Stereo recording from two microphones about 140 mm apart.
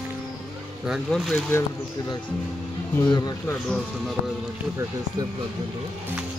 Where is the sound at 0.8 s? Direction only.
5° right (ahead or behind).